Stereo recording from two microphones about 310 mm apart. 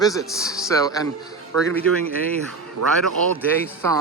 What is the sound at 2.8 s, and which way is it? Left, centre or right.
Speech, right.